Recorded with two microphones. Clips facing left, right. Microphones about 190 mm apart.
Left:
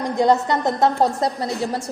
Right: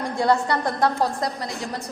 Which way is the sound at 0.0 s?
20° left (ahead or behind).